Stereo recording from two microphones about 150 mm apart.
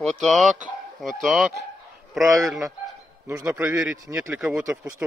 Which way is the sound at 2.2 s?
20° right (ahead or behind).